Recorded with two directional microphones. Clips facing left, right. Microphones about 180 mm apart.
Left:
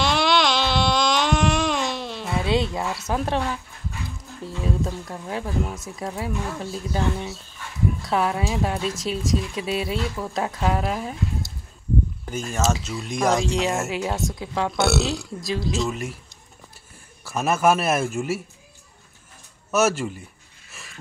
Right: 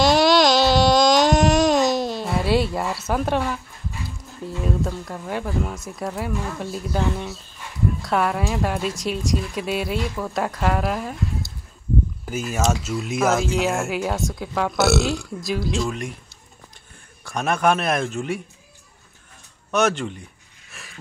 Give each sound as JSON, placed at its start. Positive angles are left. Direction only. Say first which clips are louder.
{"t": 0.0, "sound": "baby cry", "louder": "right 5 dB", "side_deg": -40}
{"t": 2.2, "sound": "speech", "louder": "even", "side_deg": -5}
{"t": 4.6, "sound": "speech", "louder": "right 1 dB", "side_deg": 0}
{"t": 12.3, "sound": "speech", "louder": "right 2 dB", "side_deg": -5}
{"t": 17.2, "sound": "speech", "louder": "even", "side_deg": 5}
{"t": 19.7, "sound": "speech", "louder": "even", "side_deg": 5}